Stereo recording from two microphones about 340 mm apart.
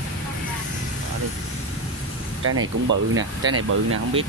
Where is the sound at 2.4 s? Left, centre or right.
Right.